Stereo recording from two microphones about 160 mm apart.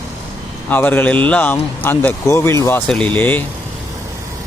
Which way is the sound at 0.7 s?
10° left (ahead or behind).